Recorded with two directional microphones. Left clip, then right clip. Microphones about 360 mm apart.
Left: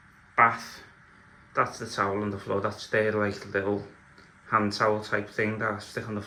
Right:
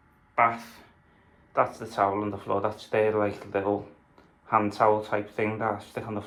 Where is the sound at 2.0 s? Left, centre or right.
Centre.